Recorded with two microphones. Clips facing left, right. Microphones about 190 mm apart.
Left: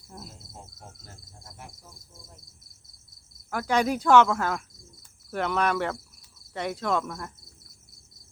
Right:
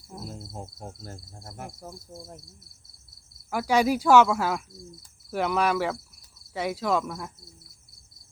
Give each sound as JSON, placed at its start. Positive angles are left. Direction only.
{"t": 0.3, "sound": "insect", "side_deg": -50}
{"t": 3.5, "sound": "speech", "side_deg": -10}
{"t": 6.5, "sound": "insect", "side_deg": -5}